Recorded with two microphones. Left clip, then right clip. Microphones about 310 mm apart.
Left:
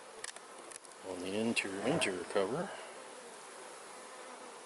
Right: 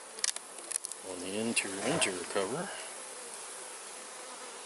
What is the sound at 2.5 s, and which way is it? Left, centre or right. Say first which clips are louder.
Speech: right 1 dB; centre.